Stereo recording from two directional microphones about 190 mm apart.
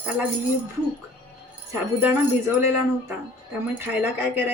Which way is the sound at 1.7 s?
15° right (ahead or behind).